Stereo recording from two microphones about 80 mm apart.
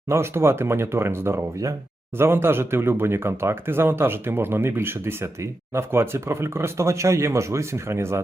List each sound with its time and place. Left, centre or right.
0.1 s speech: right